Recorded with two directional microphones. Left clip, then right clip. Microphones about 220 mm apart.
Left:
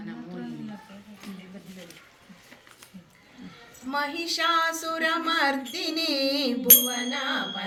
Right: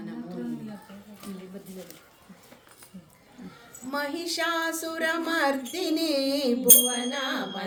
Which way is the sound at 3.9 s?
60° right (ahead or behind).